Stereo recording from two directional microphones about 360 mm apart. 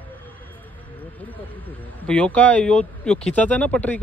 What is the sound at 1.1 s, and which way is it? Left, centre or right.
Speech, centre.